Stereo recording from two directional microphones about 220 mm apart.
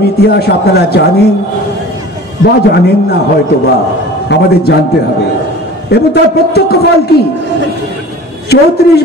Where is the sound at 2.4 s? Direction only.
50° left (ahead or behind).